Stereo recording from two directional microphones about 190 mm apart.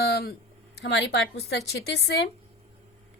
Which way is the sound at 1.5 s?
60° left (ahead or behind).